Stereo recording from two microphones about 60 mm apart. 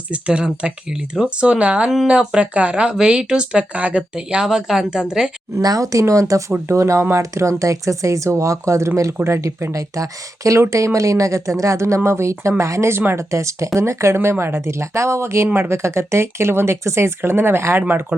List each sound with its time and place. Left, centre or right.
0.1 s speech: centre
5.6 s speech: right
6.5 s speech: right
9.7 s speech: right
12.9 s speech: right
17.7 s speech: right